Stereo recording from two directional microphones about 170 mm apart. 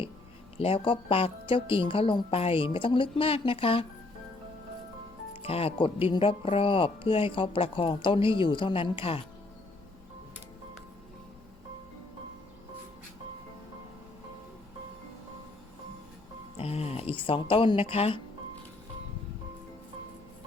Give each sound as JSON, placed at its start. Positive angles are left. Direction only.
{"t": 0.5, "sound": "speech", "side_deg": 35}
{"t": 5.3, "sound": "speech", "side_deg": 35}
{"t": 16.6, "sound": "speech", "side_deg": 40}